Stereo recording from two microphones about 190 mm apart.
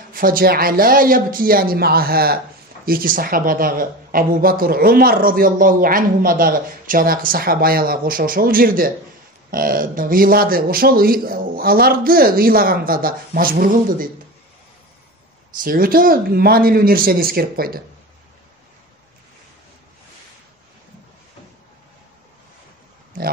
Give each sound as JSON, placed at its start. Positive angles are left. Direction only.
{"t": 0.1, "sound": "speech", "side_deg": -50}
{"t": 15.6, "sound": "speech", "side_deg": -50}